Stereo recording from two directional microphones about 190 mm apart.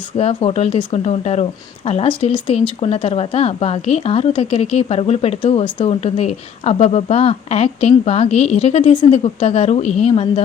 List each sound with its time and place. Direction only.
0.2 s speech: 30° left (ahead or behind)